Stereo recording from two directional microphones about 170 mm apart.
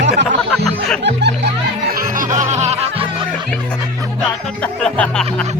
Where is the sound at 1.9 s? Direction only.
55° right (ahead or behind); by 3.0 s 35° right (ahead or behind).